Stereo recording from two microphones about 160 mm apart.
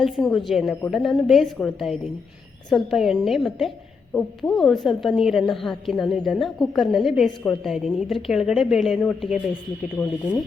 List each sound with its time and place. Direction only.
0.0 s a woman's voice: centre (ahead or behind)